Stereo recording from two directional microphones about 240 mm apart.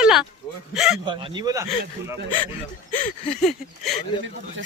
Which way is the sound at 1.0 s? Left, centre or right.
Centre.